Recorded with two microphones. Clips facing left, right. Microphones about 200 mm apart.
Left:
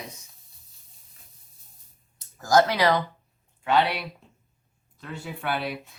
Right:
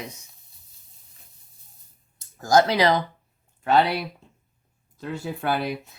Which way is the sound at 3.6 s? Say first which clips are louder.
Right 3 dB; 40° right (ahead or behind).